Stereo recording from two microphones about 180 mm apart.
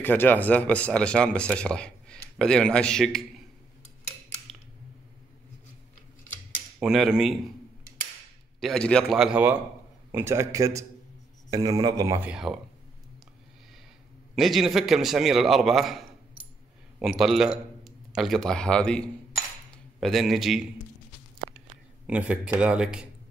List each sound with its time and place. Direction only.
0.0 s speech: 10° left (ahead or behind)
6.8 s speech: centre (ahead or behind)
8.5 s speech: 5° left (ahead or behind); by 12.2 s 20° right (ahead or behind)
12.2 s speech: 5° right (ahead or behind)
14.3 s speech: centre (ahead or behind)
17.2 s a man's voice: centre (ahead or behind)